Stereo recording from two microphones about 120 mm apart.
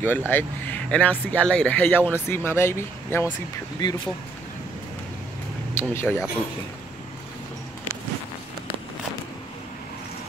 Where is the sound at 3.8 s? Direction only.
35° left (ahead or behind).